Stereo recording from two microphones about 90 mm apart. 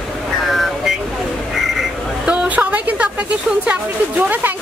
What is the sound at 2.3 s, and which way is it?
A woman's voice, 15° right (ahead or behind).